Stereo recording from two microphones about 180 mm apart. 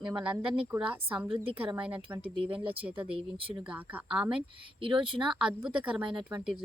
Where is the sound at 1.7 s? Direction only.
5° right (ahead or behind).